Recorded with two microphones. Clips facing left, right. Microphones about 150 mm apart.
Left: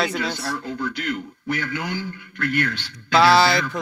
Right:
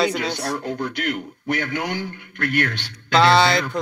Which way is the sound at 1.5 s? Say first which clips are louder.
Right 2 dB; 55° right (ahead or behind).